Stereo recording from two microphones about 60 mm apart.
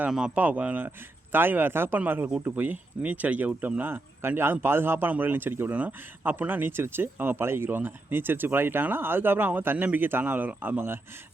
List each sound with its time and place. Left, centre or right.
0.3 s speech: right
5.7 s speech: right